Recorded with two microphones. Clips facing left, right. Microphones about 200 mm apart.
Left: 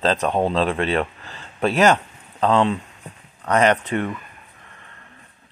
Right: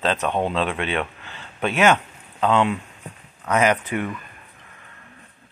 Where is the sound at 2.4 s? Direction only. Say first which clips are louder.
Left 1 dB; centre (ahead or behind).